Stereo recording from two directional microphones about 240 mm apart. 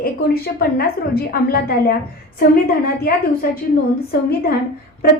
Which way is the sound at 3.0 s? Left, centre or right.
Left.